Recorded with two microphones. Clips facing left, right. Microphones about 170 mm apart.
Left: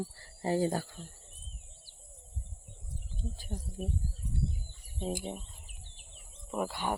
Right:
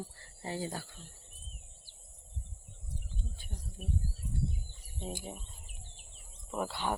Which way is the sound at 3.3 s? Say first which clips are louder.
Left 8 dB; 40° left (ahead or behind).